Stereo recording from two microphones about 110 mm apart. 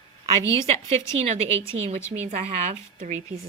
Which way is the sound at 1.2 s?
75° right (ahead or behind).